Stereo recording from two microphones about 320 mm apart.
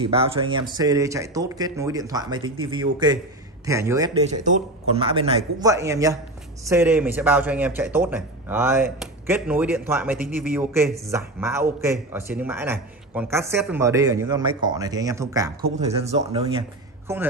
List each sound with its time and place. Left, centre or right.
0.0 s speech: centre
4.3 s speech: right